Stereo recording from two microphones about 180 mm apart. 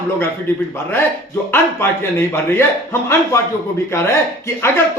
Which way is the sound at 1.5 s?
15° left (ahead or behind).